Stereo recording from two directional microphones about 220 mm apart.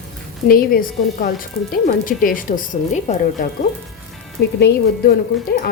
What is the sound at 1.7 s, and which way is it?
Speech, 40° left (ahead or behind).